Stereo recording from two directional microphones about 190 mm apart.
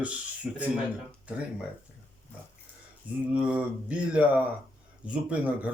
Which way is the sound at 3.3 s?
5° right (ahead or behind).